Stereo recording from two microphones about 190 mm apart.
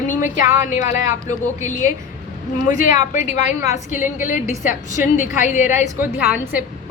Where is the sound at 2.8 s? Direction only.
40° left (ahead or behind).